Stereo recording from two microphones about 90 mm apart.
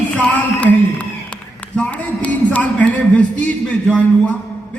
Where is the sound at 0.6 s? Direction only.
15° left (ahead or behind).